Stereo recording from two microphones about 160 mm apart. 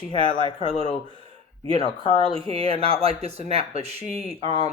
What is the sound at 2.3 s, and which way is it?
Speech, 35° right (ahead or behind).